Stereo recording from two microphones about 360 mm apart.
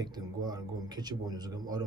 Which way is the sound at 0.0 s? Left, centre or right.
Centre.